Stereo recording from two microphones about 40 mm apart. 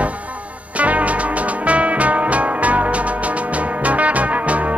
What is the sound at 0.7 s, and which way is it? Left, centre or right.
Music, right.